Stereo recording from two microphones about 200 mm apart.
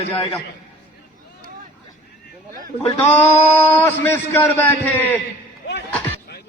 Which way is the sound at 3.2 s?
10° left (ahead or behind).